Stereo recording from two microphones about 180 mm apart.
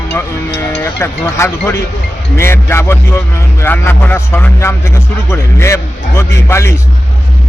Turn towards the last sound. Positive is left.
turn(degrees=15)  # may be behind; listen again after turning